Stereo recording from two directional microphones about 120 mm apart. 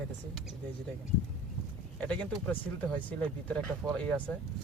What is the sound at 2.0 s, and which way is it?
Speech, 10° left (ahead or behind).